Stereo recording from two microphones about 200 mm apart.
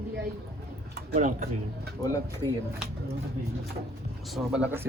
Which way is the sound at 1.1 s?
40° right (ahead or behind).